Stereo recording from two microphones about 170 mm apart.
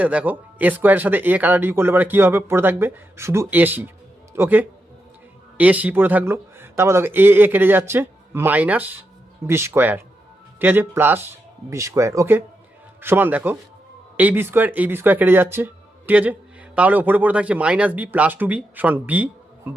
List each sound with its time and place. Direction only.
0.0 s speech: 10° right (ahead or behind)